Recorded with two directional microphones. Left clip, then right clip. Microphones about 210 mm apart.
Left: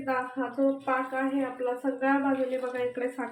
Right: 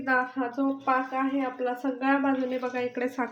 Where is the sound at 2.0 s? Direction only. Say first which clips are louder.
Right 2 dB; 50° right (ahead or behind).